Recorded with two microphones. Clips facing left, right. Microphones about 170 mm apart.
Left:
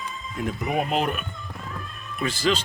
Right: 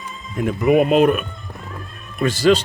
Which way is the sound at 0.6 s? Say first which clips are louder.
Right 12 dB; 65° right (ahead or behind).